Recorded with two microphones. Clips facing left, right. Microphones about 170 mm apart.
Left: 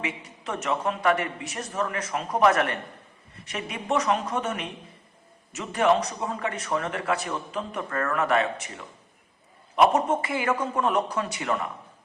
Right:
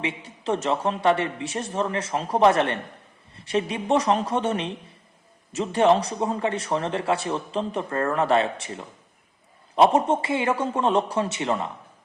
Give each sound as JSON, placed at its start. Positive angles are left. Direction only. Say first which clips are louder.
{"t": 0.0, "sound": "a man's voice", "louder": "right 4 dB", "side_deg": -30}